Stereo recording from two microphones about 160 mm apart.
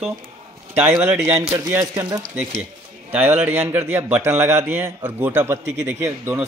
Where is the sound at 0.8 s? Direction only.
10° right (ahead or behind).